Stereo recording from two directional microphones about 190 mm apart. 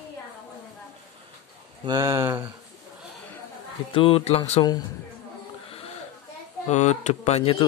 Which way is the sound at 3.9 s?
30° left (ahead or behind).